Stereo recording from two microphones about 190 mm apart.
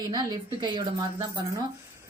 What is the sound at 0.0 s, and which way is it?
Speech, 20° right (ahead or behind).